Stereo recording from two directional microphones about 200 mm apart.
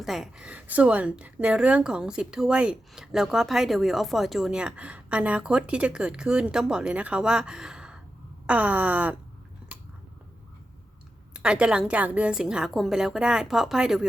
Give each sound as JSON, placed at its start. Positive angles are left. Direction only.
{"t": 0.0, "sound": "a woman's voice", "side_deg": 0}
{"t": 11.3, "sound": "a woman's voice", "side_deg": -5}